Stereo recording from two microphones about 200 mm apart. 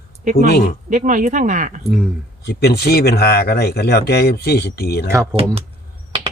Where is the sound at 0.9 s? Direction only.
40° right (ahead or behind).